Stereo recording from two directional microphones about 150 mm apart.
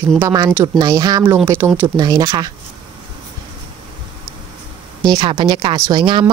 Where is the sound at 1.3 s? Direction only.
15° right (ahead or behind).